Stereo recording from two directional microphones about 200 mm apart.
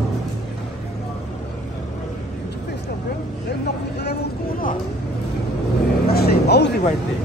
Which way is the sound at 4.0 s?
55° left (ahead or behind).